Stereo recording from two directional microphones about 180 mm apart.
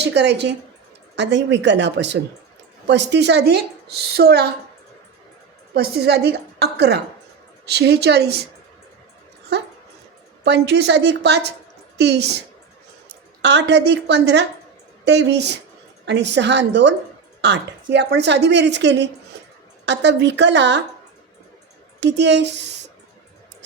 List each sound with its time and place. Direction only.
0.0 s a woman's voice: 70° right (ahead or behind)
5.7 s a woman's voice: 60° right (ahead or behind)
10.4 s a woman's voice: 70° right (ahead or behind)
13.4 s a woman's voice: 70° right (ahead or behind)
22.0 s a woman's voice: 75° right (ahead or behind)